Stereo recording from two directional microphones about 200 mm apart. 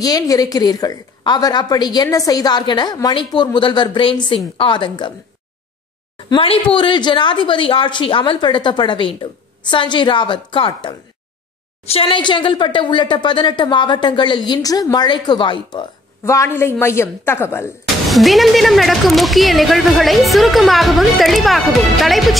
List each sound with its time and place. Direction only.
0.0 s speech: 20° left (ahead or behind)
6.3 s speech: 25° left (ahead or behind)
18.1 s speech: centre (ahead or behind)